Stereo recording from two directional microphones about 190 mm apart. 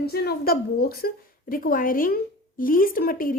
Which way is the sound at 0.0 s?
55° left (ahead or behind).